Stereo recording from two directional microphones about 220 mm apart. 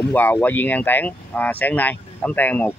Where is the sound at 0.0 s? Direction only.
10° left (ahead or behind).